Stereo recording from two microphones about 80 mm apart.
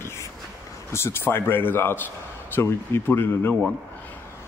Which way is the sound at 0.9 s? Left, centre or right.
Left.